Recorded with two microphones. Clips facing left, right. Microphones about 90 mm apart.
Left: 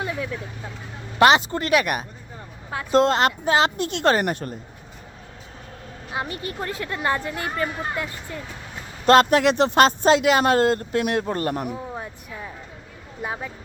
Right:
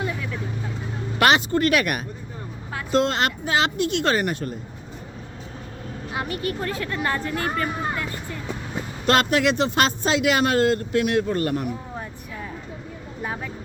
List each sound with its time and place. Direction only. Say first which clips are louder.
1.2 s speech: left 2 dB; 25° left (ahead or behind)
2.9 s speech: left 3 dB; 40° left (ahead or behind)
6.1 s speech: right 1 dB; 25° left (ahead or behind)
9.0 s speech: left 4 dB; 40° left (ahead or behind)
13.2 s speech: left 1 dB; 15° left (ahead or behind)